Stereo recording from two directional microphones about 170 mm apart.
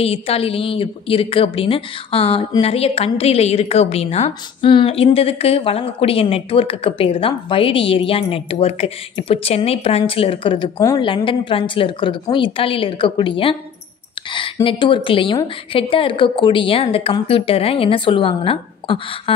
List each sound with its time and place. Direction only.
0.0 s a woman's voice: 35° left (ahead or behind)